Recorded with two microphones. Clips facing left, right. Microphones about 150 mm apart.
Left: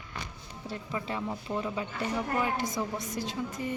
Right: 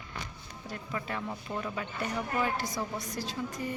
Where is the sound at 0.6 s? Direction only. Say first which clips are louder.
Left 2 dB; 25° left (ahead or behind).